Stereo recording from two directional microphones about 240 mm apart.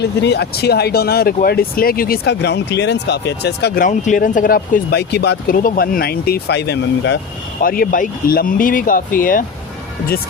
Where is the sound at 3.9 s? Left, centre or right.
Left.